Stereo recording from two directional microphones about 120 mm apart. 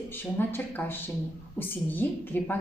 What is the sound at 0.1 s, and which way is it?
Speech, 15° left (ahead or behind).